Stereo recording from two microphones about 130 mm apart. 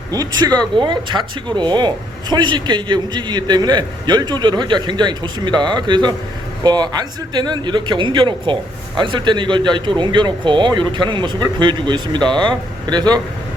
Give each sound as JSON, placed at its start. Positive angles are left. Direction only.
{"t": 0.1, "sound": "speech", "side_deg": -30}